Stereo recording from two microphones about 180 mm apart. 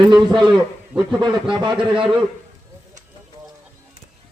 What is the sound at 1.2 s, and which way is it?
Speech, 25° right (ahead or behind).